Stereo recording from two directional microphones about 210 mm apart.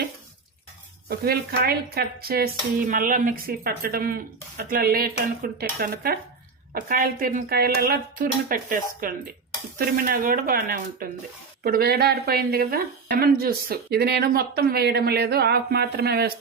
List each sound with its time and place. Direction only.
1.0 s speech: 45° right (ahead or behind)